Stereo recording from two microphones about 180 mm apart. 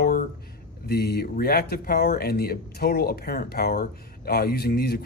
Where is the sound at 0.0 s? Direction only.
55° left (ahead or behind).